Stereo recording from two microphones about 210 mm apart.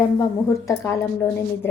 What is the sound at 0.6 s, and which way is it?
Speech, 15° left (ahead or behind).